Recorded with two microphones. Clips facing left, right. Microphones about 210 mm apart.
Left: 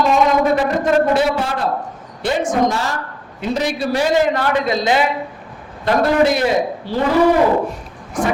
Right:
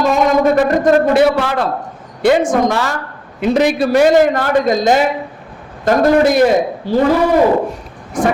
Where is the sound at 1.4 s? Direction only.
90° right.